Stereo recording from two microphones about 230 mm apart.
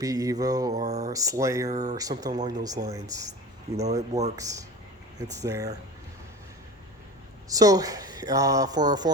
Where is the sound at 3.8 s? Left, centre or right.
Right.